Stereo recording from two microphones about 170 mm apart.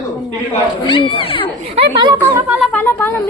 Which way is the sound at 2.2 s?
10° right (ahead or behind).